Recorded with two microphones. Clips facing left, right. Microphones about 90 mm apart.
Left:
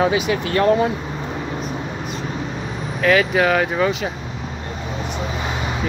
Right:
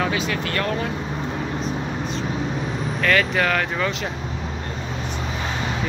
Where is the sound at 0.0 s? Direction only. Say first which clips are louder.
Left 5 dB; 15° left (ahead or behind).